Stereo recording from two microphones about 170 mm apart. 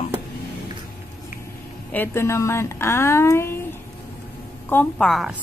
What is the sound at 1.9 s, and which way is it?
Speech, 15° left (ahead or behind).